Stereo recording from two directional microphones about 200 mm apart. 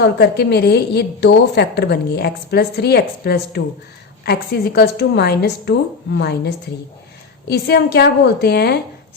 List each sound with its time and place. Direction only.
0.0 s a woman's voice: 55° left (ahead or behind)